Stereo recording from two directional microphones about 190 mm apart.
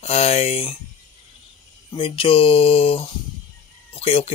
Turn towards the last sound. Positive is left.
turn(degrees=30)  # may be behind; listen again after turning